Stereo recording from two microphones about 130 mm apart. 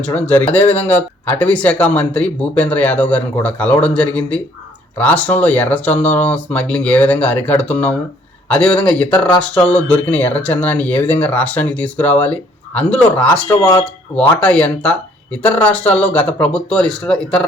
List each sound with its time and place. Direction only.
0.0 s speech: 10° left (ahead or behind)
13.6 s speech: 30° left (ahead or behind)
13.8 s speech: 5° left (ahead or behind)